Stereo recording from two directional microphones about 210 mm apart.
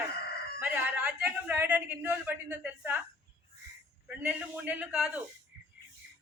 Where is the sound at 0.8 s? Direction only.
5° right (ahead or behind).